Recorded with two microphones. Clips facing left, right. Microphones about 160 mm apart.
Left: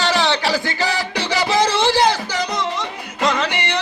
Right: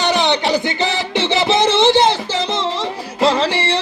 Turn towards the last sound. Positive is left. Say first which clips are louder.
# right 4 dB
turn(degrees=-30)  # may be behind; listen again after turning